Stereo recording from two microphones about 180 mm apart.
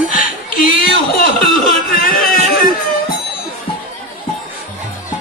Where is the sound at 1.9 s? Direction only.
55° left (ahead or behind).